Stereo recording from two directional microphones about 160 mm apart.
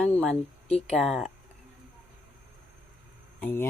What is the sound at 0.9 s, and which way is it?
Speech, centre (ahead or behind).